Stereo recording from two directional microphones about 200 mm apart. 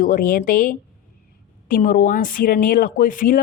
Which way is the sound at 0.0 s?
45° left (ahead or behind).